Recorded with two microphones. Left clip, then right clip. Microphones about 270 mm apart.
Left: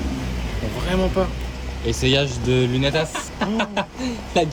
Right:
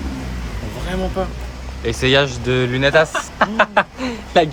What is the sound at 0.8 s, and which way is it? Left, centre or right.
Speech, centre.